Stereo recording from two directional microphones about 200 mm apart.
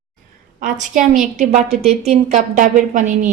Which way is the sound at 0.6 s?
40° right (ahead or behind).